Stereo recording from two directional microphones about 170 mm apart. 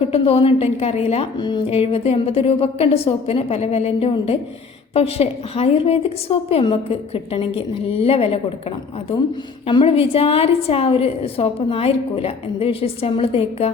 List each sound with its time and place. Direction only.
0.1 s a woman's voice: 35° left (ahead or behind)
9.6 s a woman's voice: 35° left (ahead or behind)